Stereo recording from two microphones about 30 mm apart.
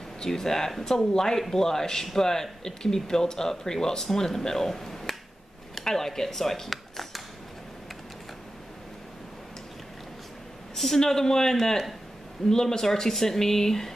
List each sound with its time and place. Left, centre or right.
0.3 s speech: centre
6.7 s a sound: centre
11.0 s speech: centre